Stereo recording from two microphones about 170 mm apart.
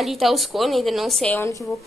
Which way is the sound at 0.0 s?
Centre (ahead or behind).